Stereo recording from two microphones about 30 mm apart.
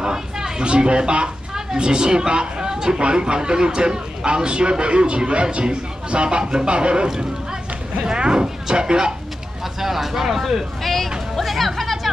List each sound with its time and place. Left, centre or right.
0.0 s speech: right
0.7 s a man's voice: right
9.8 s speech: centre
10.8 s a sound: centre
11.3 s chatter: centre